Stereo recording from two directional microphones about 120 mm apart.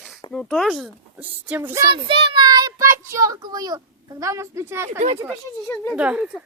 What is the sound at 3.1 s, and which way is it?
A woman's voice, 25° right (ahead or behind).